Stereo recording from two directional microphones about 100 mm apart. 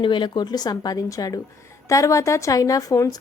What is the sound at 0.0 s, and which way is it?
A woman's voice, 55° left (ahead or behind).